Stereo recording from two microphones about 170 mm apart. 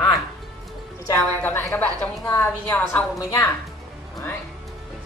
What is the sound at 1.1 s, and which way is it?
A woman's voice, 15° left (ahead or behind).